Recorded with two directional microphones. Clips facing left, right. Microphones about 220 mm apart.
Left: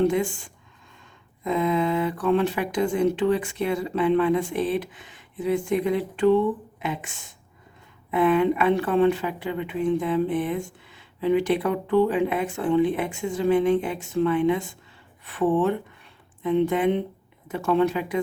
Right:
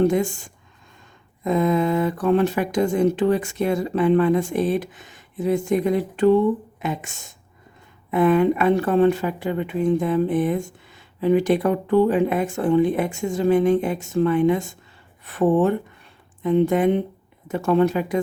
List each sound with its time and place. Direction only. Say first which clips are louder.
0.0 s speech: right 3 dB; 45° right (ahead or behind)